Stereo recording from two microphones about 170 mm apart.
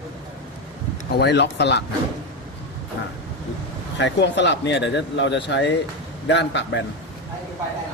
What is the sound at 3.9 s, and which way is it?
Speech, 90° left.